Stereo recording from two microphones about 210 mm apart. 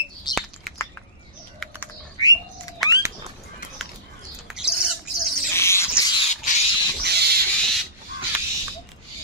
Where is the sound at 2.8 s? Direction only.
Centre (ahead or behind).